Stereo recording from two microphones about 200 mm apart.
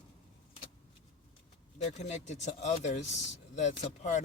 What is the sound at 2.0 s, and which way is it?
Speech, 35° left (ahead or behind).